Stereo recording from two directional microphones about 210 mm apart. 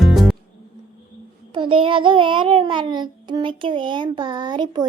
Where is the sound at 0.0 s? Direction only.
Centre (ahead or behind).